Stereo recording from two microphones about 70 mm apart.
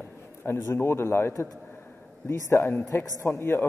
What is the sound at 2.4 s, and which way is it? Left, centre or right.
Speech, left.